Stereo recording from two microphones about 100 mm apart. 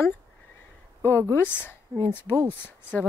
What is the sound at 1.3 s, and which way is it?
Speech, 20° left (ahead or behind).